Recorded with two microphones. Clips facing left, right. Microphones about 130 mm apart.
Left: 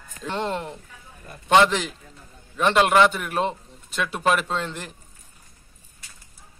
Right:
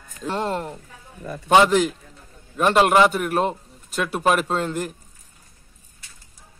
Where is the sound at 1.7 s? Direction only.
45° right (ahead or behind).